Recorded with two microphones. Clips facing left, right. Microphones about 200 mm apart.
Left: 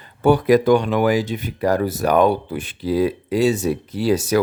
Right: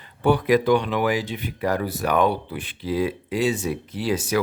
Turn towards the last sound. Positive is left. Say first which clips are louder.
# left 5 dB
turn(degrees=40)  # may be behind; listen again after turning